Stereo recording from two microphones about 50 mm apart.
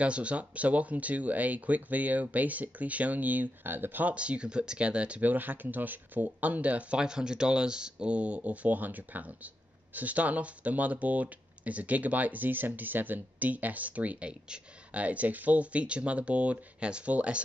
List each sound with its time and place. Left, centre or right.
0.0 s speech: right
4.1 s speech: right
5.2 s speech: right
7.0 s speech: centre